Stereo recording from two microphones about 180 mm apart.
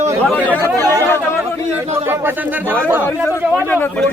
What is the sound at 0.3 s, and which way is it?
Speech, 10° left (ahead or behind).